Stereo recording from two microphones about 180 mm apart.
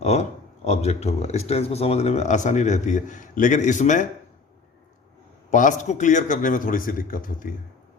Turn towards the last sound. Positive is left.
turn(degrees=50)  # may be behind; listen again after turning